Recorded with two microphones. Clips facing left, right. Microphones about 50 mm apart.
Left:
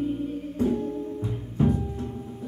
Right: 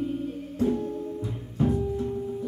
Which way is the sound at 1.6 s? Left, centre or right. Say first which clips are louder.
Left 2 dB; left.